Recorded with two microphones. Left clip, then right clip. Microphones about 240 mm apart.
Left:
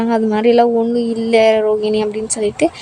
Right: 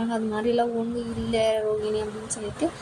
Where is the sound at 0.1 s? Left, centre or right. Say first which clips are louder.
Left 13 dB; left.